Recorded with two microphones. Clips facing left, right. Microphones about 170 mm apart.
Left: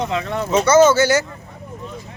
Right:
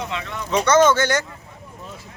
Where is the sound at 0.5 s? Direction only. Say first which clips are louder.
Left 3 dB; 5° left (ahead or behind).